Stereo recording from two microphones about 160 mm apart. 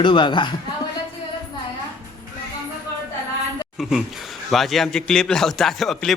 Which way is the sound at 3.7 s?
Centre (ahead or behind).